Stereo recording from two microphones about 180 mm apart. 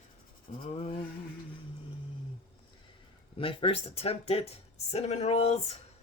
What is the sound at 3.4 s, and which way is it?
Speech, 30° left (ahead or behind).